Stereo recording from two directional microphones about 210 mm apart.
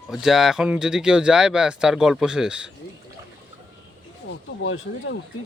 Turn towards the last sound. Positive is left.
turn(degrees=65)  # may be behind; listen again after turning